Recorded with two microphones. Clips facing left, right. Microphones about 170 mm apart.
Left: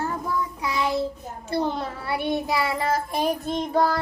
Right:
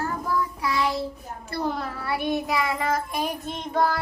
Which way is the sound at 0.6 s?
20° left (ahead or behind).